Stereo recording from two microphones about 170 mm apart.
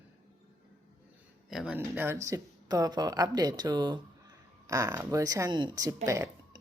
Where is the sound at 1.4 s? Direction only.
5° right (ahead or behind).